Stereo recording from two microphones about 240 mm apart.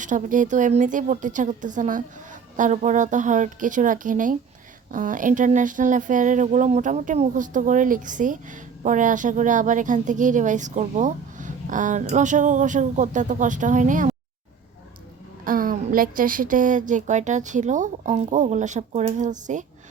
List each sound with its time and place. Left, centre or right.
0.0 s speech: right
15.4 s speech: right